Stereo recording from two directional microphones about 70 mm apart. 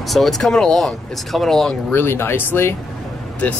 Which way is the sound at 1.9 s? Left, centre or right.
Left.